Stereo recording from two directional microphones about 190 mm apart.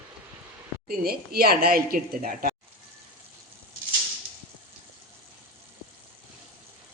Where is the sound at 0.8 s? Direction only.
50° right (ahead or behind).